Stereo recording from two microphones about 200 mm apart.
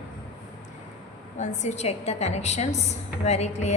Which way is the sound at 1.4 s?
35° left (ahead or behind).